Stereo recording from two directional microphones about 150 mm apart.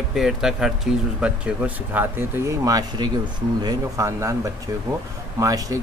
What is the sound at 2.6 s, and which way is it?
A man's voice, 25° right (ahead or behind).